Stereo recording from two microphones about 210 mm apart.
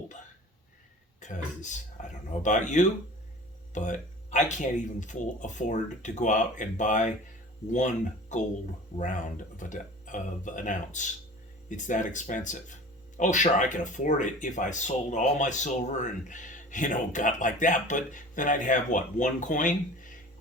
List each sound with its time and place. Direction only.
1.2 s speech: 35° left (ahead or behind)